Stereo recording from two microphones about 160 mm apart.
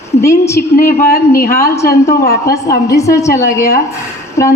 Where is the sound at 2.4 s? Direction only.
20° left (ahead or behind).